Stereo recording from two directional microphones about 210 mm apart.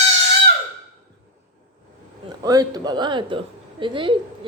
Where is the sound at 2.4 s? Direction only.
20° right (ahead or behind).